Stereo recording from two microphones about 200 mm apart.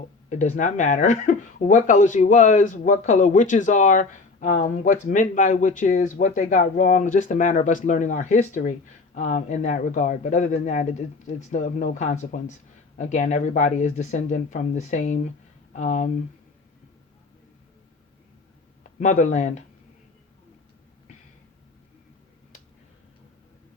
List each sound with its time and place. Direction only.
0.3 s speech: 40° left (ahead or behind)
18.8 s speech: 40° left (ahead or behind)